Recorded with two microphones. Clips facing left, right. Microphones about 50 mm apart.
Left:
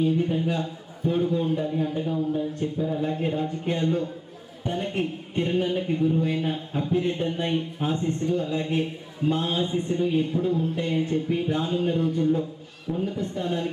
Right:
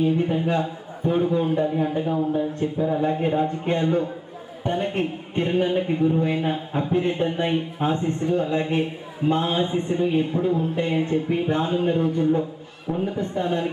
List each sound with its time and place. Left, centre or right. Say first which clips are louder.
0.0 s speech: right 2 dB; centre
3.0 s speech: right 5 dB; centre
6.9 s speech: right 3 dB; centre
11.8 s speech: right 3 dB; right
12.9 s speech: right 3 dB; right
13.1 s speech: right 4 dB; centre